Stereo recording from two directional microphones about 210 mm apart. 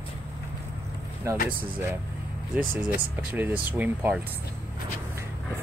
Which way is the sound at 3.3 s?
10° right (ahead or behind).